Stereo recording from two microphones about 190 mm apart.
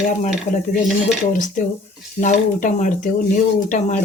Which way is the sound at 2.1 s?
40° left (ahead or behind).